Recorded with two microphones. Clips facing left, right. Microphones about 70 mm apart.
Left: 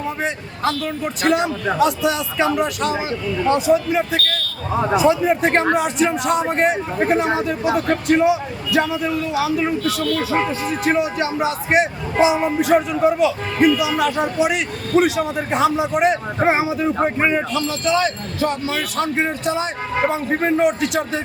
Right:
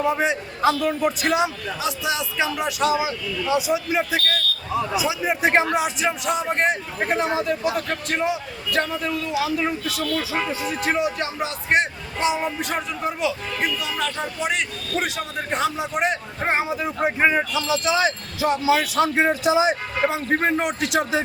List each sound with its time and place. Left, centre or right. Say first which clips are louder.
0.0 s a man's voice: right 3 dB; centre
4.8 s a sound: left 7 dB; left
5.0 s a man's voice: left 6 dB; centre